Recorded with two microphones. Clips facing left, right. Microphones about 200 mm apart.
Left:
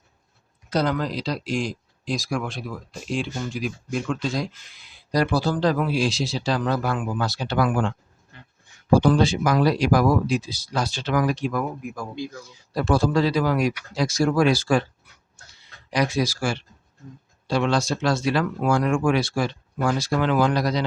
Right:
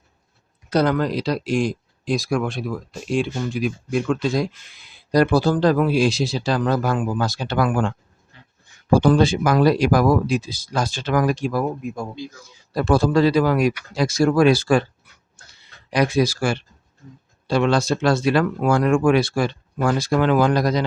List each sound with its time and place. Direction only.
0.7 s speech: 60° right (ahead or behind)
5.1 s speech: 55° right (ahead or behind)
9.0 s speech: 55° right (ahead or behind)
11.5 s speech: 25° right (ahead or behind)
12.7 s speech: 55° right (ahead or behind)
15.9 s speech: 55° right (ahead or behind)